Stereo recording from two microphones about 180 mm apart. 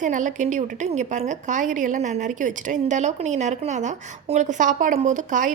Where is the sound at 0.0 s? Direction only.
45° right (ahead or behind).